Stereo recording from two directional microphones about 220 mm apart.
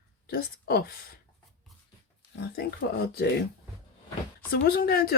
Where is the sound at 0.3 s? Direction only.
40° left (ahead or behind).